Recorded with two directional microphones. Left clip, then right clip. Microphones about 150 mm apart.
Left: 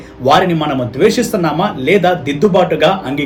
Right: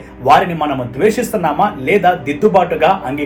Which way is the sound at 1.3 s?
30° left (ahead or behind).